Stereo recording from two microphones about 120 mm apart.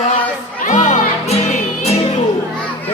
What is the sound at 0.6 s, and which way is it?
Music, 90° left.